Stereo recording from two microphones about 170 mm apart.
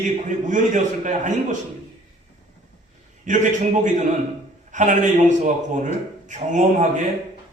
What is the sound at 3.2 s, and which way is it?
A man's voice, 50° right (ahead or behind).